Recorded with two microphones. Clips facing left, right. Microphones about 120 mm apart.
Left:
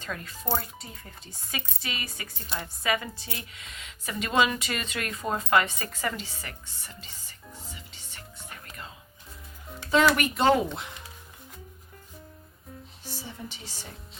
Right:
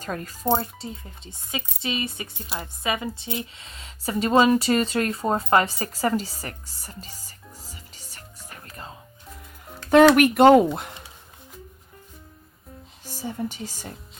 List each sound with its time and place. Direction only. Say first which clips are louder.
0.0 s speech: right 6 dB; 40° right (ahead or behind)
0.4 s speech: right 8 dB; 25° right (ahead or behind)
8.7 s music: right 6 dB; 35° right (ahead or behind)
9.9 s speech: right 9 dB; 60° right (ahead or behind)
13.2 s speech: right 15 dB; 45° right (ahead or behind)